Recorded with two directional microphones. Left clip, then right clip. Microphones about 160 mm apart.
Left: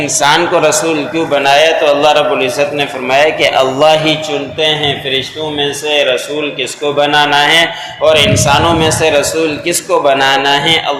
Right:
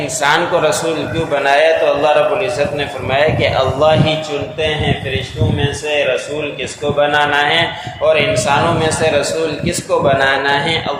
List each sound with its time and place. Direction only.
0.0 s a man's voice: 25° left (ahead or behind)
6.6 s a man's voice: 25° left (ahead or behind)